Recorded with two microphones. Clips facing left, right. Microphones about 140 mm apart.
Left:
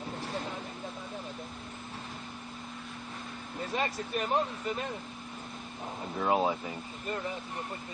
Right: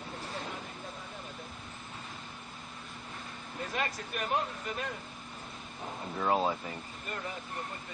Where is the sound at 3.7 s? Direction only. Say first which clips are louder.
Left 4 dB; 30° left (ahead or behind).